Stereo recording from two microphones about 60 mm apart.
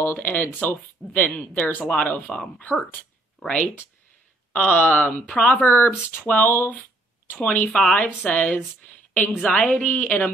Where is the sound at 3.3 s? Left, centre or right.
Centre.